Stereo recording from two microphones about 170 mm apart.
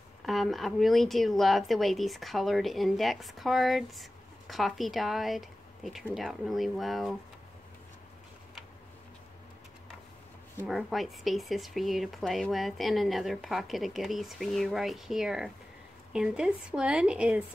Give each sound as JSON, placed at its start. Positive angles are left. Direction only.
{"t": 0.2, "sound": "a woman's voice", "side_deg": 0}
{"t": 10.7, "sound": "a woman's voice", "side_deg": 0}